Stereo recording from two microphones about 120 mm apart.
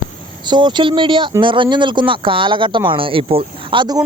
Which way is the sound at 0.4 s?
40° right (ahead or behind).